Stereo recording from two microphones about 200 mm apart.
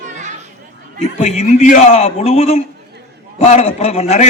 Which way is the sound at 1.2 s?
35° left (ahead or behind).